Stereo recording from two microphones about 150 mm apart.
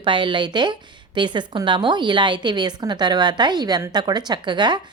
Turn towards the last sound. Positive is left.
turn(degrees=-30)  # may be behind; listen again after turning